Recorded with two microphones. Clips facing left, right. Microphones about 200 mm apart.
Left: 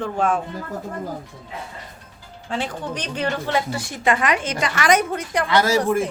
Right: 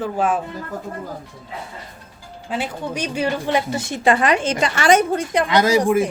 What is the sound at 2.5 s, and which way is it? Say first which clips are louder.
A woman's voice: right 1 dB; 10° right (ahead or behind).